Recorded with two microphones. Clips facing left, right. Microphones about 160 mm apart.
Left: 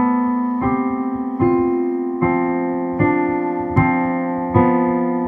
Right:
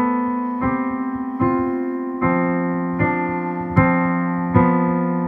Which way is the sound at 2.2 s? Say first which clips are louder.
Even; 35° left (ahead or behind).